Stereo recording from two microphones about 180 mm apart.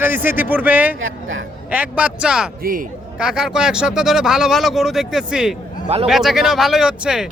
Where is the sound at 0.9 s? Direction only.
90° right.